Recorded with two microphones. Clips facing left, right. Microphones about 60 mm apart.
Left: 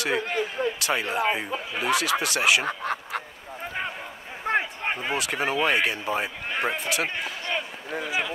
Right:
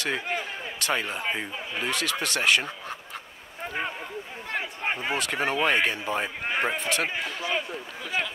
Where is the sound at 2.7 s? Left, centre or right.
Left.